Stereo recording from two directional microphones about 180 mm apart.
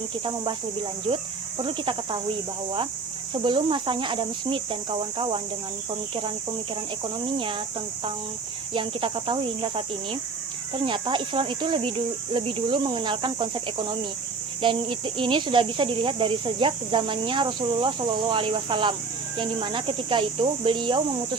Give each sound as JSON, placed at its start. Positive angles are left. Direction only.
{"t": 1.0, "sound": "speech", "side_deg": -30}
{"t": 3.4, "sound": "speech", "side_deg": -25}
{"t": 8.7, "sound": "speech", "side_deg": -30}